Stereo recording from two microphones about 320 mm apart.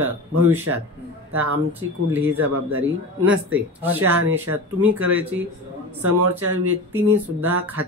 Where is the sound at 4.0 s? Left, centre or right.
Right.